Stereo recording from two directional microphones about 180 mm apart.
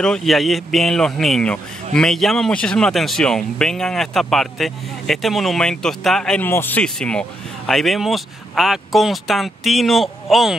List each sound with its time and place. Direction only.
0.0 s speech: centre (ahead or behind)